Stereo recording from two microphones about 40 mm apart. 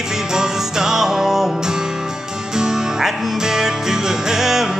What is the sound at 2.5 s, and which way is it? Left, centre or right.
Music, centre.